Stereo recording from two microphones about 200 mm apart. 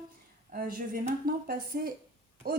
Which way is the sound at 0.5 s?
45° right (ahead or behind).